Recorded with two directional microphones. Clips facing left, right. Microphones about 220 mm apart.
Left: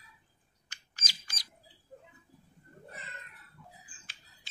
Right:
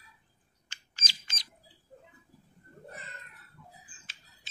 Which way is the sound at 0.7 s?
25° right (ahead or behind).